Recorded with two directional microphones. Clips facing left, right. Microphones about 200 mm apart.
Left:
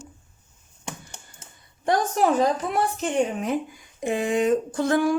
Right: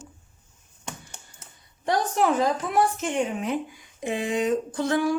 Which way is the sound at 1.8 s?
50° left (ahead or behind).